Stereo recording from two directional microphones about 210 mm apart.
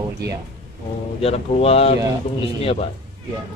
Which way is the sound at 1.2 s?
30° left (ahead or behind).